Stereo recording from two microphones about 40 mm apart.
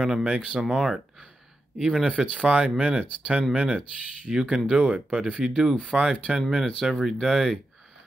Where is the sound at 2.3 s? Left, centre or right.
Right.